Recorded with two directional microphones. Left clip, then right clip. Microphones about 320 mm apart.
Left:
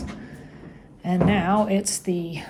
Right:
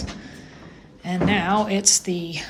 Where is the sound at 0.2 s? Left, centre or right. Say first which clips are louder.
Right 1 dB; centre.